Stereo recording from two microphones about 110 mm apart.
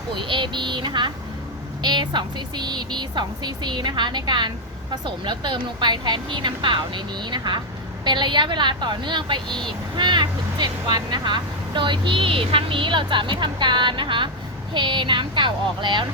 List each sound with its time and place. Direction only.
0.1 s speech: 50° right (ahead or behind)
9.5 s speech: 5° left (ahead or behind)
10.0 s speech: 40° right (ahead or behind)